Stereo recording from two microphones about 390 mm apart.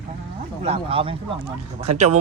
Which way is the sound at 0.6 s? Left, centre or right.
Centre.